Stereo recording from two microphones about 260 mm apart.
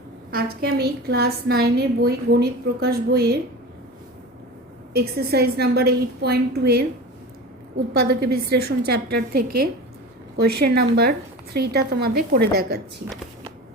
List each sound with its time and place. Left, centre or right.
0.3 s a woman's voice: right
4.9 s a woman's voice: right
7.9 s a woman's voice: right
10.6 s a woman's voice: right